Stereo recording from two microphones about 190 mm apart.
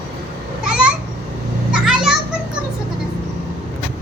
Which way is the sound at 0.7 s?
5° right (ahead or behind).